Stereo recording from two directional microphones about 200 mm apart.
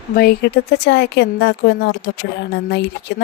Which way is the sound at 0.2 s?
50° left (ahead or behind).